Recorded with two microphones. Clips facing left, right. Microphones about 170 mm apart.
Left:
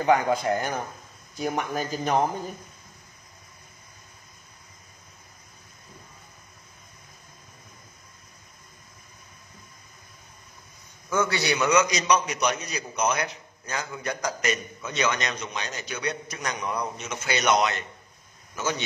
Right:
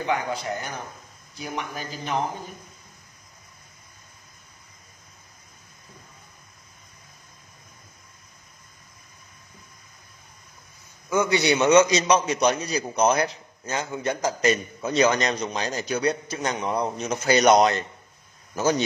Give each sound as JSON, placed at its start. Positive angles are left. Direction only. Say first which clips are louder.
{"t": 0.0, "sound": "speech", "louder": "left 5 dB", "side_deg": 45}
{"t": 11.1, "sound": "a man's voice", "louder": "right 4 dB", "side_deg": -15}